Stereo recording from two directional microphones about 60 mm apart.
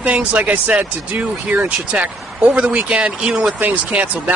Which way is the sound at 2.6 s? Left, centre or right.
Centre.